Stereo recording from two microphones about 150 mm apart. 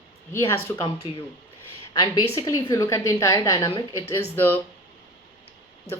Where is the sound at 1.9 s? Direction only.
30° left (ahead or behind).